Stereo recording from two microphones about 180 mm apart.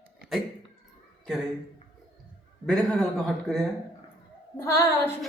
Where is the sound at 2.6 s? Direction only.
Centre (ahead or behind).